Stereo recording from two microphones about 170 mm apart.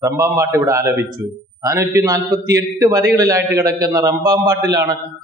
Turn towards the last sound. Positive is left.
turn(degrees=-20)  # may be behind; listen again after turning